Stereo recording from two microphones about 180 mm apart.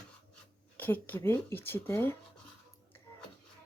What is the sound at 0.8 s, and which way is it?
Speech, 10° left (ahead or behind).